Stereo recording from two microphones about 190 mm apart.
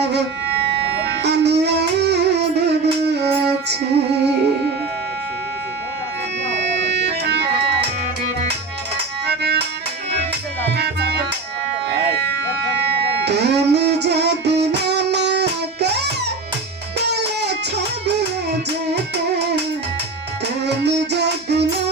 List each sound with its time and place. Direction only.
1.2 s music: 60° right (ahead or behind)
7.1 s music: 60° right (ahead or behind)
9.2 s music: 60° right (ahead or behind)
10.8 s music: 60° right (ahead or behind)
13.2 s music: 60° right (ahead or behind)
17.1 s music: 60° right (ahead or behind)
20.7 s music: 60° right (ahead or behind)